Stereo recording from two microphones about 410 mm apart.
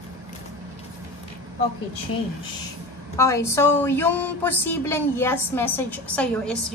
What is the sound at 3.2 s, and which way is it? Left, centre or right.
Speech, centre.